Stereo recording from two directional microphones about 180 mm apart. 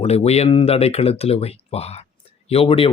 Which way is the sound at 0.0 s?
35° left (ahead or behind).